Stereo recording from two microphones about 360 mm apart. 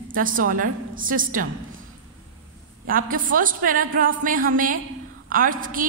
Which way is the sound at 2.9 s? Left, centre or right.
Right.